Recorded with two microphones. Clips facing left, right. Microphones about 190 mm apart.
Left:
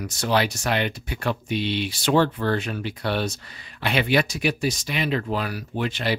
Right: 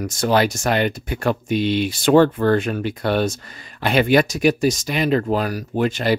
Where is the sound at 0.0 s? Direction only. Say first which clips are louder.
Right 5 dB; 45° right (ahead or behind).